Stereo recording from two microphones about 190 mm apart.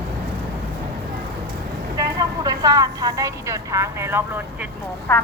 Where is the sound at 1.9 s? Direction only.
20° right (ahead or behind).